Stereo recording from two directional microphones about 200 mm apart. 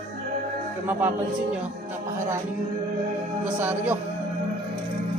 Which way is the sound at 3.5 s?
10° right (ahead or behind).